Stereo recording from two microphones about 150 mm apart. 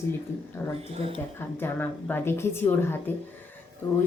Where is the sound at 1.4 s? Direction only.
15° left (ahead or behind).